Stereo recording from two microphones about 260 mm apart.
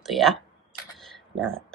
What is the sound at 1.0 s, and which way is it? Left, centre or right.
Camera, centre.